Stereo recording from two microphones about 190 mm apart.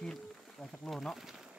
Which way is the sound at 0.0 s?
Centre (ahead or behind).